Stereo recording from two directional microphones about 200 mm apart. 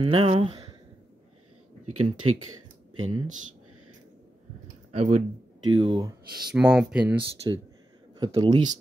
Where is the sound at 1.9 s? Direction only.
90° right.